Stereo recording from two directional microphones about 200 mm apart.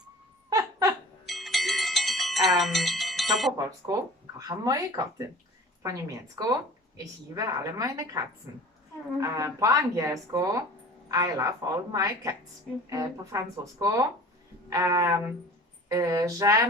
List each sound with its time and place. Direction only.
0.5 s a sound: 15° right (ahead or behind)
1.3 s music: centre (ahead or behind)
4.4 s speech: 20° right (ahead or behind)